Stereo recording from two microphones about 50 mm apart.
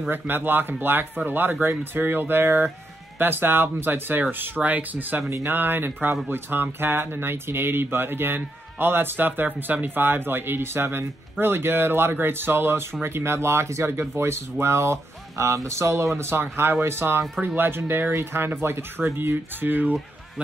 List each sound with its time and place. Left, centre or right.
0.1 s speech: right
16.2 s speech: right
18.1 s speech: right